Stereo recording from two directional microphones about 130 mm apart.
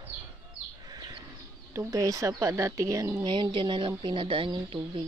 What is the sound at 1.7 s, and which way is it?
A woman's voice, 25° right (ahead or behind).